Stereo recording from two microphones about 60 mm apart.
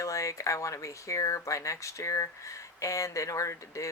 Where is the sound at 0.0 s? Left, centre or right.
Left.